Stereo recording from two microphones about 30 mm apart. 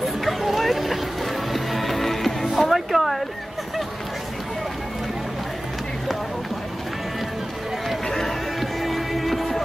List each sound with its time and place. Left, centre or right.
0.0 s music: centre
2.7 s a sound: centre
8.1 s run: centre
8.5 s music: centre